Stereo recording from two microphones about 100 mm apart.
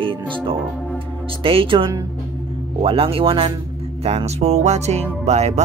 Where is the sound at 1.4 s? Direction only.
65° right (ahead or behind).